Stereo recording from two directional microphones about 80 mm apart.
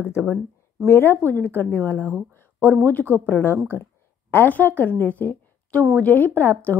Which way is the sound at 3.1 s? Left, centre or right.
Left.